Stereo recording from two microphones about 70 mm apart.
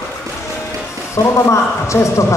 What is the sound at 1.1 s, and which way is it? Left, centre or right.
Speech, left.